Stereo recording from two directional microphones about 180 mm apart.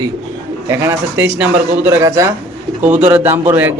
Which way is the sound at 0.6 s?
15° right (ahead or behind).